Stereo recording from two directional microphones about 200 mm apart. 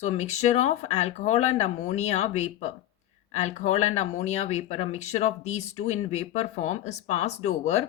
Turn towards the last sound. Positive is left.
turn(degrees=35)  # may be behind; listen again after turning